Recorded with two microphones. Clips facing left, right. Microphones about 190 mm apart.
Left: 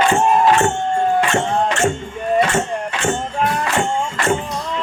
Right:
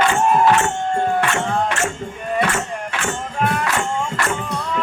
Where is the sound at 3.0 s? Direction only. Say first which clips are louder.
Left 2 dB; 35° left (ahead or behind).